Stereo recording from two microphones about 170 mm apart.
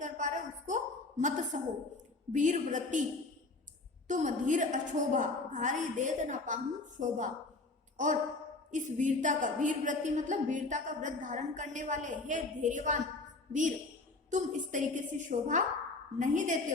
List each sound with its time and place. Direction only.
0.0 s a sound: 45° right (ahead or behind)
2.3 s a woman's voice: 45° right (ahead or behind)
4.1 s a woman's voice: 45° right (ahead or behind)
8.7 s a woman's voice: 50° right (ahead or behind)